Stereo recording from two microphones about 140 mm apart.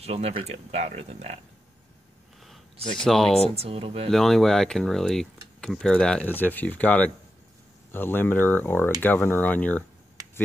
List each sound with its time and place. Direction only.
0.0 s speech: 45° right (ahead or behind)
3.0 s speech: 5° left (ahead or behind)
3.5 s speech: 45° right (ahead or behind)
4.1 s speech: centre (ahead or behind)